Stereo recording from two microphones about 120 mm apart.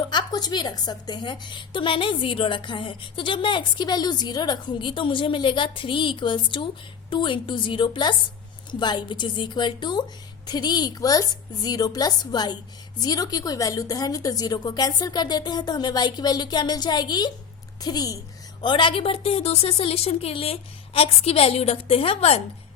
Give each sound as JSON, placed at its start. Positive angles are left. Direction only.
{"t": 0.1, "sound": "a woman's voice", "side_deg": 35}
{"t": 18.6, "sound": "a woman's voice", "side_deg": 45}